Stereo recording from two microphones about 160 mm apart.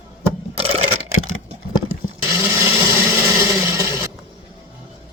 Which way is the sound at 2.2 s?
15° right (ahead or behind).